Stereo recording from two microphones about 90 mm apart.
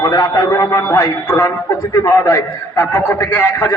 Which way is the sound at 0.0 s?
40° left (ahead or behind).